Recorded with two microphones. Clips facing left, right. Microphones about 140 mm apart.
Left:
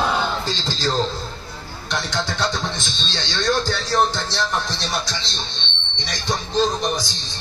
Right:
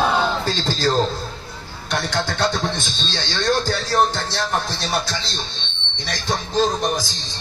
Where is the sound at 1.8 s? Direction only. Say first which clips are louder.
Right 2 dB; 55° right (ahead or behind).